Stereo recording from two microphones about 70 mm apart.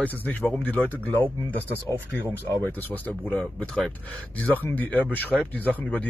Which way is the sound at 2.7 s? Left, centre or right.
Left.